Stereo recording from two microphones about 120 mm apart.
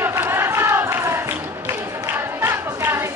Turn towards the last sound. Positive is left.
turn(degrees=-20)  # may be behind; listen again after turning